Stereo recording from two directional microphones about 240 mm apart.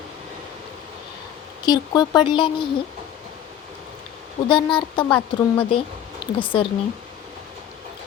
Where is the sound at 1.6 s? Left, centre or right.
Centre.